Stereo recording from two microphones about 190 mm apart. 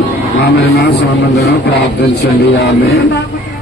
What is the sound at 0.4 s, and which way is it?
Music, 60° left (ahead or behind).